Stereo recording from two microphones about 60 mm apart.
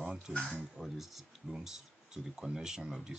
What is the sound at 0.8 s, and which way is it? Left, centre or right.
Speech, centre.